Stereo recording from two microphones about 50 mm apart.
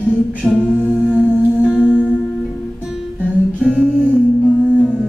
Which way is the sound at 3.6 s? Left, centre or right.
Right.